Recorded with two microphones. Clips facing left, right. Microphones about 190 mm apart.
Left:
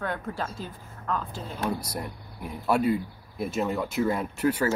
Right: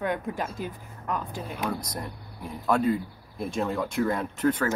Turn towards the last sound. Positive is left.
turn(degrees=10)  # may be behind; listen again after turning